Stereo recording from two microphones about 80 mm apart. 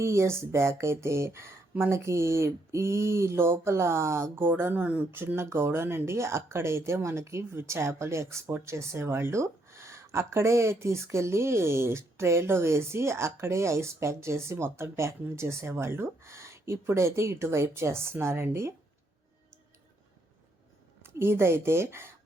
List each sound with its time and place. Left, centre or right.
0.0 s speech: right
21.0 s speech: right